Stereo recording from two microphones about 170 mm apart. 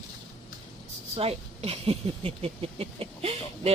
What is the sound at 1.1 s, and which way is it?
Speech, 35° right (ahead or behind).